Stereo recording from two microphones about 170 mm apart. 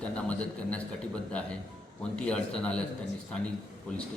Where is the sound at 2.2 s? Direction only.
5° left (ahead or behind).